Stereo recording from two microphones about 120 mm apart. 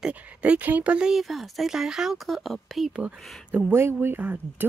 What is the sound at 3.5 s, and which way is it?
Speech, 15° right (ahead or behind).